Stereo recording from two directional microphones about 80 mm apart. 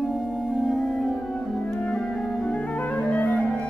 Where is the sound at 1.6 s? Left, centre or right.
Centre.